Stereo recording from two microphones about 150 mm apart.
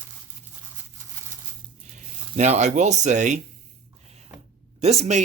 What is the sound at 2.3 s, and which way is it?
Speech, 50° right (ahead or behind).